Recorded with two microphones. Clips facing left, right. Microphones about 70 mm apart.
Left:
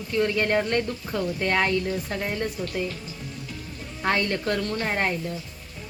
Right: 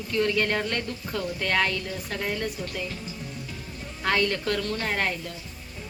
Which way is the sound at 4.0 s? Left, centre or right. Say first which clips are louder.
Even; left.